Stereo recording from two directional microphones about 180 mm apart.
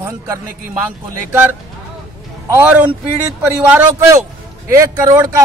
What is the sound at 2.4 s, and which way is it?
A man's voice, 10° right (ahead or behind).